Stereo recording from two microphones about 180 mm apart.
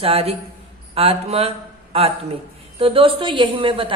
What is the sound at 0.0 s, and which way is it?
A woman's voice, 35° right (ahead or behind).